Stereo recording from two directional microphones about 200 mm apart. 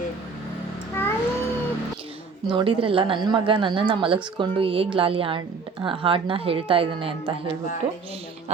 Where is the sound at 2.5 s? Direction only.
25° right (ahead or behind).